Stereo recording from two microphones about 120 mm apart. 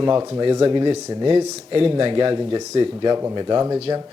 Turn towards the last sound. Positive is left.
turn(degrees=-35)  # may be behind; listen again after turning